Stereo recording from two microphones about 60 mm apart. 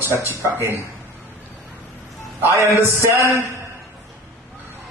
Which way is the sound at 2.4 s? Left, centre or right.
Right.